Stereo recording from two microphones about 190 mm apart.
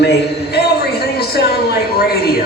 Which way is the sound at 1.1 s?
55° left (ahead or behind).